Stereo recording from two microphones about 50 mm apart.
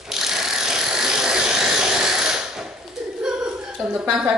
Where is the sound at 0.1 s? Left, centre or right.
Centre.